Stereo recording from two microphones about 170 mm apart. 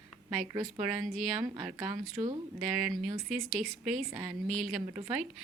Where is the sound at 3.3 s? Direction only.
Centre (ahead or behind).